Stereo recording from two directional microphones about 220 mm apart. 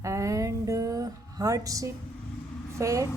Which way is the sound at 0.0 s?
15° right (ahead or behind).